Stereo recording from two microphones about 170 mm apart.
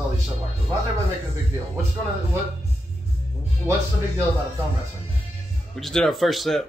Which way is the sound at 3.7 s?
15° right (ahead or behind).